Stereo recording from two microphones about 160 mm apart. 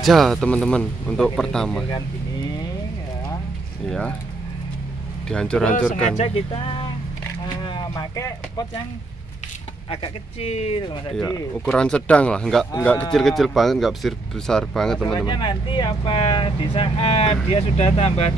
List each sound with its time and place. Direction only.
0.0 s speech: centre (ahead or behind)
5.3 s speech: 5° left (ahead or behind)
6.1 s speech: 35° left (ahead or behind)
7.4 s a sound: 25° left (ahead or behind)
9.8 s speech: 35° left (ahead or behind)
11.5 s speech: 5° left (ahead or behind)
15.1 s speech: 30° left (ahead or behind)